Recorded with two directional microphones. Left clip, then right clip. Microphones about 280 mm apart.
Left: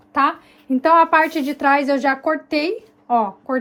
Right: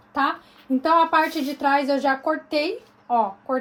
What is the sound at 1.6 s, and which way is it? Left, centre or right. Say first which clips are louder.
A woman's voice: left 4 dB; left.